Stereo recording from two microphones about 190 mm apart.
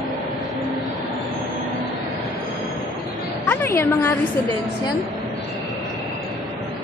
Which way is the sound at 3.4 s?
15° left (ahead or behind).